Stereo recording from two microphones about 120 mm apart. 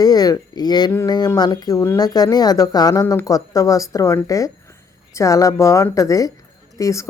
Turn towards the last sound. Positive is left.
turn(degrees=25)  # may be behind; listen again after turning